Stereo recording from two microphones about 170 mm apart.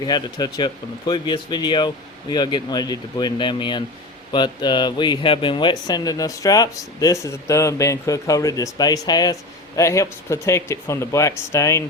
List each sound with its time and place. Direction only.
0.0 s speech: 25° left (ahead or behind)